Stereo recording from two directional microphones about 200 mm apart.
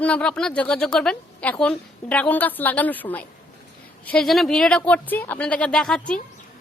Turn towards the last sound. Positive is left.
turn(degrees=0)  # may be behind; listen again after turning